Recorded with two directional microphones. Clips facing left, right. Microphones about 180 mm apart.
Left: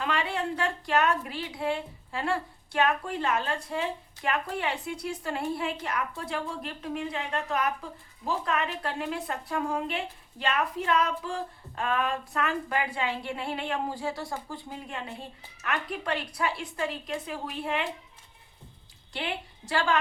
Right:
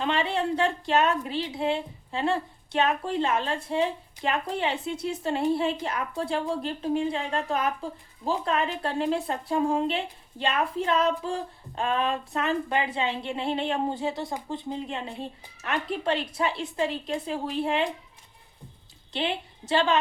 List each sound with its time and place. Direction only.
0.0 s speech: 25° right (ahead or behind)
19.1 s a woman's voice: 25° right (ahead or behind)